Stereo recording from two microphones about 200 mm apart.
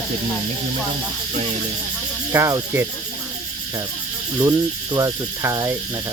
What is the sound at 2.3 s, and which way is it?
Speech, 15° right (ahead or behind).